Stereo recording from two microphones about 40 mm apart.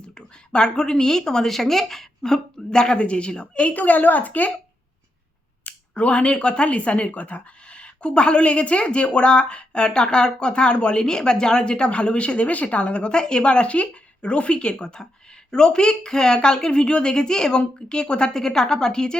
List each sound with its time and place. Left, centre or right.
0.0 s speech: left
3.8 s speech: left
5.6 s speech: left; by 19.1 s centre